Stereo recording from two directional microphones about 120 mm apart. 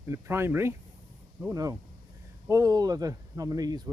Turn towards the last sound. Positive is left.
turn(degrees=-30)  # may be behind; listen again after turning